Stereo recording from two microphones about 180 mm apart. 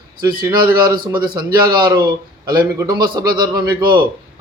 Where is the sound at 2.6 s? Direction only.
20° right (ahead or behind).